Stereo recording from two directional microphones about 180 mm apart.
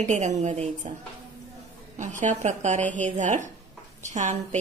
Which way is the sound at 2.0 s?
45° right (ahead or behind).